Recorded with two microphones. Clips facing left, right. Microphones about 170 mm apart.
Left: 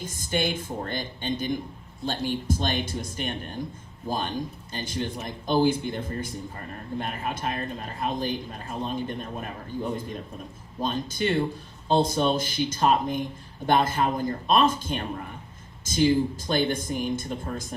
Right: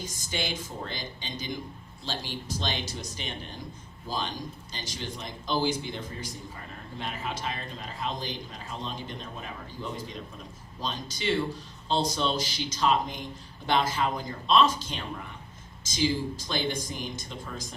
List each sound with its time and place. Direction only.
0.3 s speech: 55° left (ahead or behind)